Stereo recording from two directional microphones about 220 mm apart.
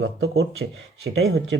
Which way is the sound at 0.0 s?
65° right (ahead or behind).